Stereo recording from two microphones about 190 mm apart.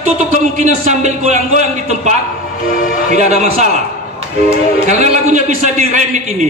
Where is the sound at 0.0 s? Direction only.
40° right (ahead or behind).